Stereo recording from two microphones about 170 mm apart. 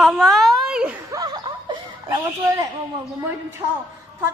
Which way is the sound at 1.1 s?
25° right (ahead or behind).